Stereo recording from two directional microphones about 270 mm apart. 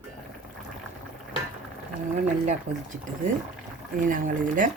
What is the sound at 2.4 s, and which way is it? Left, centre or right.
Speech, right.